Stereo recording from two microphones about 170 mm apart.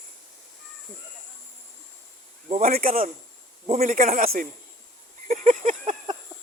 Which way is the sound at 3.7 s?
45° right (ahead or behind).